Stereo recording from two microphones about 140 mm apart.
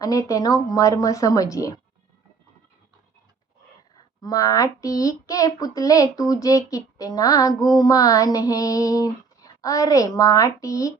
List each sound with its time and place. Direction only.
0.0 s child singing: 25° left (ahead or behind)
4.2 s child singing: 25° left (ahead or behind)